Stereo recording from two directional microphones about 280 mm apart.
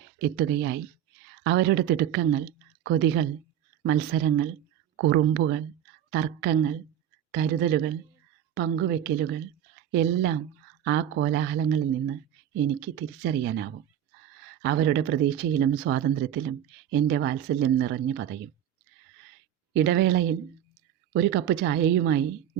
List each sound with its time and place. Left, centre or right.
0.2 s speech: right
13.0 s speech: right
19.7 s speech: right